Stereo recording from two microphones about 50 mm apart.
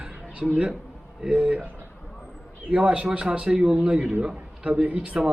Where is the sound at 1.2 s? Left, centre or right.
Right.